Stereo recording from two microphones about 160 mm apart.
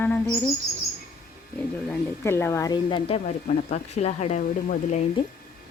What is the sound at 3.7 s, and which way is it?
Speech, 45° left (ahead or behind).